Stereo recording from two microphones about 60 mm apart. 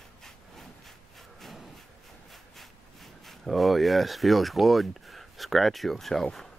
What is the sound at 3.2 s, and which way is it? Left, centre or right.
Speech, centre.